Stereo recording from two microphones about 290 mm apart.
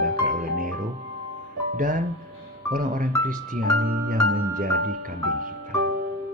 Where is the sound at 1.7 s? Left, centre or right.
Right.